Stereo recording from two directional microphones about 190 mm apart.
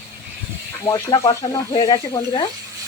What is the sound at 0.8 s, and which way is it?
Speech, 20° left (ahead or behind).